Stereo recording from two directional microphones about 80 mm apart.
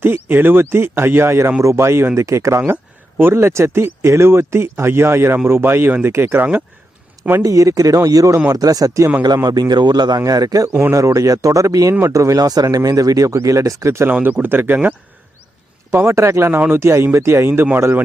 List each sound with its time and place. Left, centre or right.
0.0 s speech: right
7.4 s speech: right
10.2 s speech: right
10.7 s speech: centre
10.9 s speech: right
14.1 s speech: right